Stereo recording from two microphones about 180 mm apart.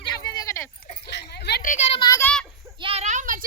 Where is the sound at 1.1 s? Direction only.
65° left (ahead or behind).